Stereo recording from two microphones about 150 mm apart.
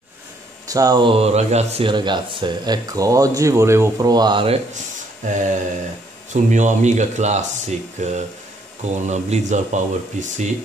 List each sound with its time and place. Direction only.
0.7 s speech: 25° right (ahead or behind)
4.7 s a sound: 55° right (ahead or behind)
6.3 s speech: 55° right (ahead or behind)